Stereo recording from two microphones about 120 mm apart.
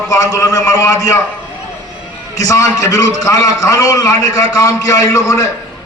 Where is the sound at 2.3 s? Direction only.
30° left (ahead or behind).